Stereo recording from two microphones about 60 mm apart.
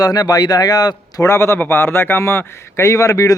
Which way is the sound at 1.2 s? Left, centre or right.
Left.